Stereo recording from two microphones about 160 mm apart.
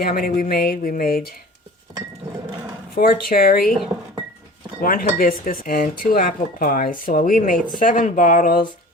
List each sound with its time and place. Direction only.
0.0 s speech: 65° left (ahead or behind)
3.0 s speech: 65° left (ahead or behind)
4.8 s speech: 65° left (ahead or behind)